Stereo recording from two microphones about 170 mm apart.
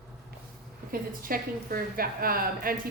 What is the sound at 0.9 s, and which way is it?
A woman's voice, 55° right (ahead or behind).